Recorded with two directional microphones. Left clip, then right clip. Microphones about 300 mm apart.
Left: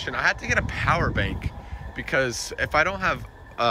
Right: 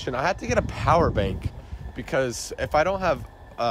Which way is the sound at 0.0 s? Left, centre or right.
Centre.